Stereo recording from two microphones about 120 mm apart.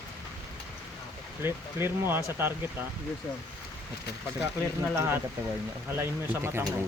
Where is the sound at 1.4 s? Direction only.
20° right (ahead or behind).